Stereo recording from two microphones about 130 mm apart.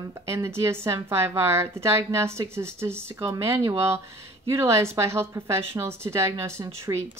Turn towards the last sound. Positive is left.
turn(degrees=-25)  # may be behind; listen again after turning